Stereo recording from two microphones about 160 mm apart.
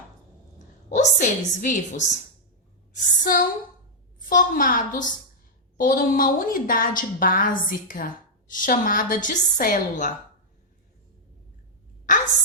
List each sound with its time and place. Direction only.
0.9 s a woman's voice: 45° left (ahead or behind)
3.2 s a woman's voice: 60° left (ahead or behind)
12.1 s a sound: 55° left (ahead or behind)